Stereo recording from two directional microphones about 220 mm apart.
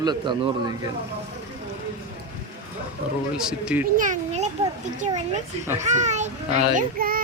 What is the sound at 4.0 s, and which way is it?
Speech, 30° right (ahead or behind).